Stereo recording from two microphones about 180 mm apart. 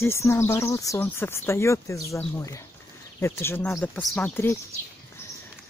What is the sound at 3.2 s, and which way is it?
Speech, 15° left (ahead or behind).